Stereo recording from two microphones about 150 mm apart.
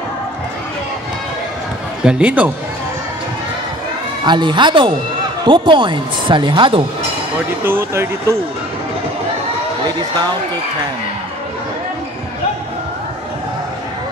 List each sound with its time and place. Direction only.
2.0 s speech: 10° right (ahead or behind)
4.2 s speech: 30° right (ahead or behind)
7.6 s speech: 15° right (ahead or behind)